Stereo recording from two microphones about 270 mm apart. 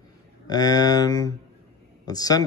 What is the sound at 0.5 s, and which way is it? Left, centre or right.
Speech, centre.